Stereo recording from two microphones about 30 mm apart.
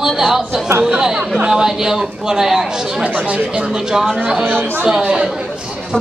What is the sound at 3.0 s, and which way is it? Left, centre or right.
Speech, right.